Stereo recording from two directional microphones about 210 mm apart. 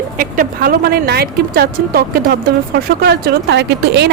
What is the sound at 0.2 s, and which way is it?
Speech, 45° right (ahead or behind).